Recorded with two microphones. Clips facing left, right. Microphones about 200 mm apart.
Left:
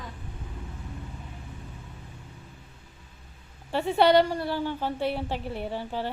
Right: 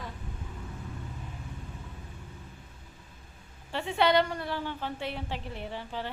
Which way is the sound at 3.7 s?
40° left (ahead or behind).